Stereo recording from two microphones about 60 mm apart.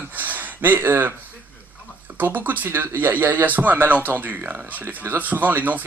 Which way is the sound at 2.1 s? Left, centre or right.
Right.